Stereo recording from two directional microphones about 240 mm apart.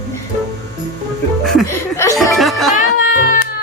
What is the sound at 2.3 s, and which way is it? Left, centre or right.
Music, centre.